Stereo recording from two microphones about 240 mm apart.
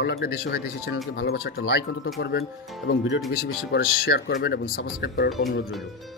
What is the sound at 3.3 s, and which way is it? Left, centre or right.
Speech, left.